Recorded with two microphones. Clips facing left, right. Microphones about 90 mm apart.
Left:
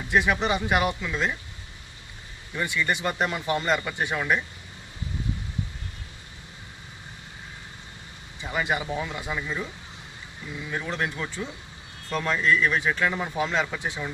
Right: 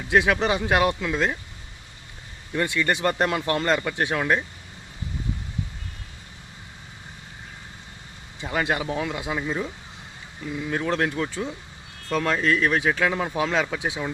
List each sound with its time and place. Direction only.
0.1 s speech: 90° right
2.5 s speech: 70° right (ahead or behind)
8.5 s speech: 75° right (ahead or behind)
10.7 s speech: 75° right (ahead or behind)